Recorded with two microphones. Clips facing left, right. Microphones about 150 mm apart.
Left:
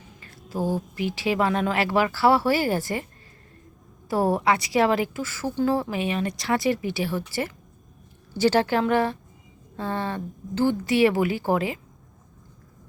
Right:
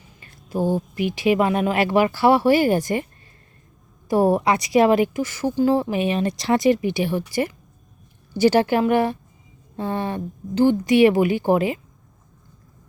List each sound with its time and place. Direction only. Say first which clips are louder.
0.4 s speech: right 4 dB; 20° right (ahead or behind)
4.1 s a woman's voice: right 4 dB; 15° right (ahead or behind)